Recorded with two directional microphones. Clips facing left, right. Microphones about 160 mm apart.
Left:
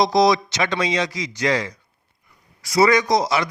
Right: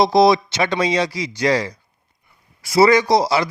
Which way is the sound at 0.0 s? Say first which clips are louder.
Right 3 dB; 30° right (ahead or behind).